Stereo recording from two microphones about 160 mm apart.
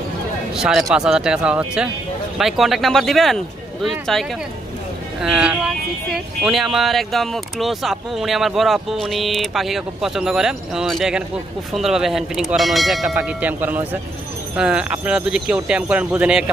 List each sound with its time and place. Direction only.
0.6 s speech: centre (ahead or behind)